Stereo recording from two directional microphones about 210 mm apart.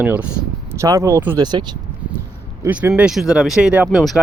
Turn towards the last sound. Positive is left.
turn(degrees=-5)  # may be behind; listen again after turning